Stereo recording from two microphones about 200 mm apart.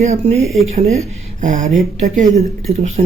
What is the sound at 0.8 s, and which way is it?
Speech, 30° right (ahead or behind).